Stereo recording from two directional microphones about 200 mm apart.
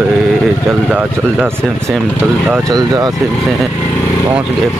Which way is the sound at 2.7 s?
20° right (ahead or behind).